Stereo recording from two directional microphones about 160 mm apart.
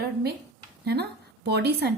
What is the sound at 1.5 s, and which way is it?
Speech, 90° right.